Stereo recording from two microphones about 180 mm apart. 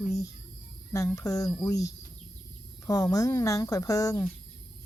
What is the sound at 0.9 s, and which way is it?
Speech, 15° left (ahead or behind).